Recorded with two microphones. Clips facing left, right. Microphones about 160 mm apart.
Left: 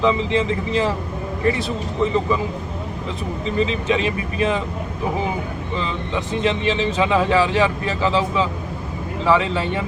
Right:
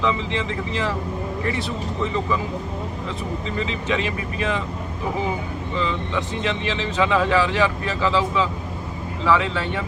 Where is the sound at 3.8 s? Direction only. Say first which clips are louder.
Left 4 dB; 30° left (ahead or behind).